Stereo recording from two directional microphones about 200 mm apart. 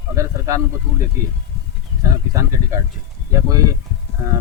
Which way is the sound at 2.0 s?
15° right (ahead or behind).